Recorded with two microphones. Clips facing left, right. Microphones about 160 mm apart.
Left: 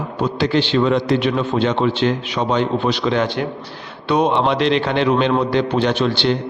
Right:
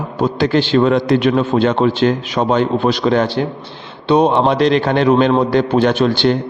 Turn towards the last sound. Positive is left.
turn(degrees=-45)  # may be behind; listen again after turning